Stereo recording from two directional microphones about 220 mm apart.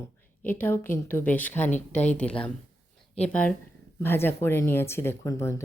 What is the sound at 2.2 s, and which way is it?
Speech, 5° left (ahead or behind).